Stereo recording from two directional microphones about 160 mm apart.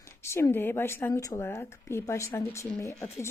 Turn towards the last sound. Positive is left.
turn(degrees=15)  # may be behind; listen again after turning